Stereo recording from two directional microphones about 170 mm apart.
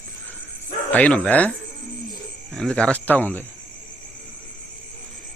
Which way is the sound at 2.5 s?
5° left (ahead or behind).